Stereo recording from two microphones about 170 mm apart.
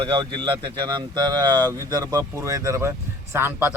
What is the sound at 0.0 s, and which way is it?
Speech, 30° right (ahead or behind).